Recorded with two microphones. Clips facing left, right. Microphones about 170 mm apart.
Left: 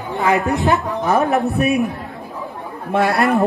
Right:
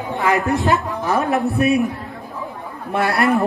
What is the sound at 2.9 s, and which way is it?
Speech, 20° left (ahead or behind).